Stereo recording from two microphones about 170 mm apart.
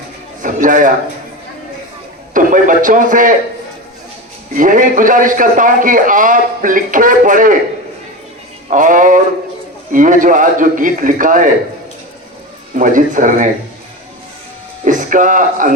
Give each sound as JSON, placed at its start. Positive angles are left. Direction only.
{"t": 0.4, "sound": "a man's voice", "side_deg": -50}
{"t": 2.3, "sound": "a man's voice", "side_deg": -50}
{"t": 4.5, "sound": "a man's voice", "side_deg": -50}
{"t": 8.7, "sound": "a man's voice", "side_deg": -50}
{"t": 12.7, "sound": "a man's voice", "side_deg": -50}
{"t": 14.8, "sound": "speech", "side_deg": -50}